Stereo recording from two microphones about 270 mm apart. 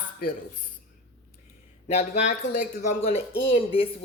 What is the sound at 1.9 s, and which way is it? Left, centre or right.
Speech, left.